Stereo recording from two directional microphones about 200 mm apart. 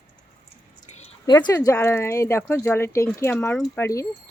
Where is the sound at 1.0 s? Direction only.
20° left (ahead or behind).